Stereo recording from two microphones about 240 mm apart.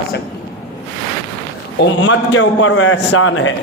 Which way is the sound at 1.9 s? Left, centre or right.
Left.